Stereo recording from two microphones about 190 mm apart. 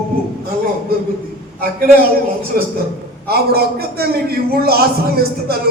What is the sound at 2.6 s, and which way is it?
A man's voice, 50° right (ahead or behind).